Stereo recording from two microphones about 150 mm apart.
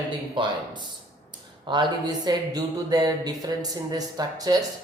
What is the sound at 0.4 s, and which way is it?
Speech, 30° right (ahead or behind).